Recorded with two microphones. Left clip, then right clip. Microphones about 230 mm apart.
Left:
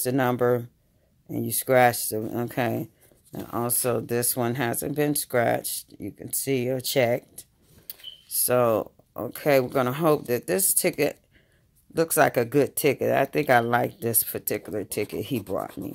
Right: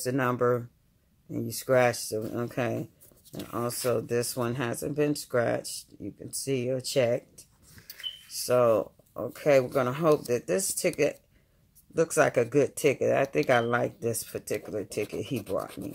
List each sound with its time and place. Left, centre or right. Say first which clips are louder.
0.0 s speech: left 3 dB; left